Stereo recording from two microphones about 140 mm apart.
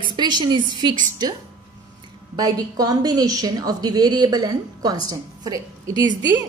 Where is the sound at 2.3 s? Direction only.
25° right (ahead or behind).